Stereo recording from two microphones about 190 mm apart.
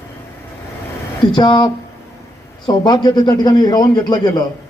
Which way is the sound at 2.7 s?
25° left (ahead or behind).